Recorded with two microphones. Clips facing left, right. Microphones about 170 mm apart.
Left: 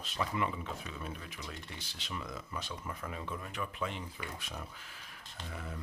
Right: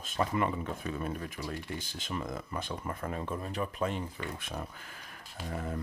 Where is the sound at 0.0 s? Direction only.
50° right (ahead or behind).